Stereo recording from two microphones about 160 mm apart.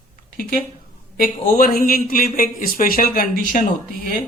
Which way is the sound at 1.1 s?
60° left (ahead or behind).